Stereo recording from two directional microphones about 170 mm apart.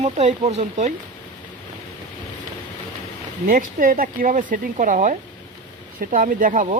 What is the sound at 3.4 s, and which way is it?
Speech, 55° right (ahead or behind).